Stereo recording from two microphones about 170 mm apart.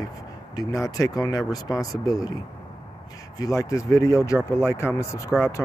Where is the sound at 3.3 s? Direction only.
20° left (ahead or behind).